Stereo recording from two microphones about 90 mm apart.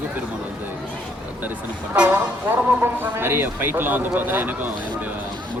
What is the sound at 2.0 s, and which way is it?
Speech, 20° right (ahead or behind).